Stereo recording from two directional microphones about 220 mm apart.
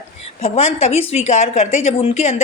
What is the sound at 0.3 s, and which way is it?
A woman's voice, 30° left (ahead or behind).